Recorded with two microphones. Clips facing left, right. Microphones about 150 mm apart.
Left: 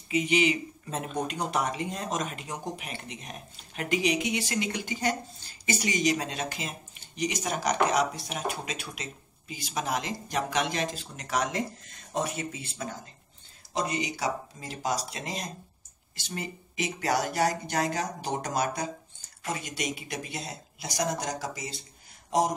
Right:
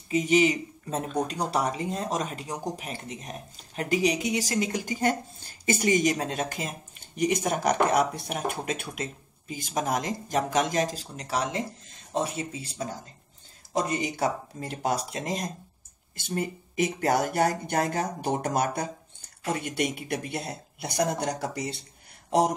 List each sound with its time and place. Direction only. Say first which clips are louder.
0.1 s speech: right 3 dB; 40° right (ahead or behind)
13.7 s speech: right 3 dB; 50° right (ahead or behind); by 21.8 s 65° right (ahead or behind)